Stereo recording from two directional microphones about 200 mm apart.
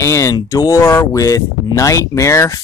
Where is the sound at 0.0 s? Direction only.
15° left (ahead or behind).